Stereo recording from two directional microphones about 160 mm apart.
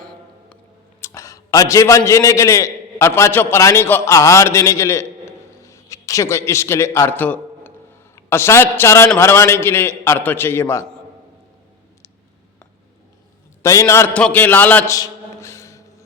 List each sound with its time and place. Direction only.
1.0 s a man's voice: 20° left (ahead or behind)
13.6 s a man's voice: 20° left (ahead or behind)
14.1 s a man's voice: 5° left (ahead or behind)
14.9 s a sound: 20° left (ahead or behind)